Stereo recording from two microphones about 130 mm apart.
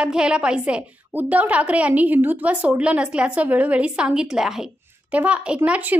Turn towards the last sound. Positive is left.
turn(degrees=-10)  # may be behind; listen again after turning